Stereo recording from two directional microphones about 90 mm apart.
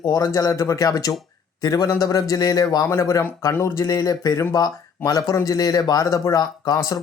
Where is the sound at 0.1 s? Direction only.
35° left (ahead or behind).